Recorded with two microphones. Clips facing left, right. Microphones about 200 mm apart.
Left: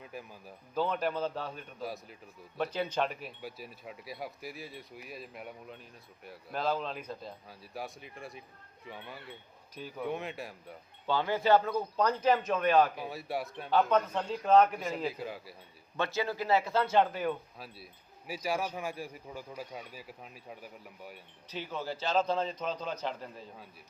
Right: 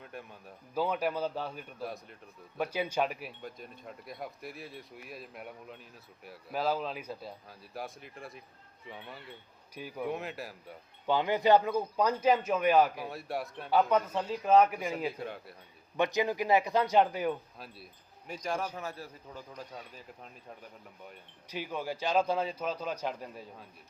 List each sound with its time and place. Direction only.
0.0 s a man's voice: centre (ahead or behind)
0.7 s speech: 10° right (ahead or behind)
1.8 s a man's voice: centre (ahead or behind)
2.6 s speech: 10° right (ahead or behind)
3.4 s a man's voice: 5° left (ahead or behind)
9.7 s speech: 10° right (ahead or behind)
10.1 s a man's voice: centre (ahead or behind)
11.0 s speech: 15° right (ahead or behind)
13.1 s a man's voice: centre (ahead or behind)
16.0 s speech: 15° right (ahead or behind)
18.3 s speech: 5° left (ahead or behind)
21.5 s speech: 10° right (ahead or behind)